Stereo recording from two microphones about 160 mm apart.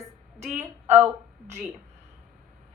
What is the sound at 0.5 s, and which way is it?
Speech, 10° right (ahead or behind).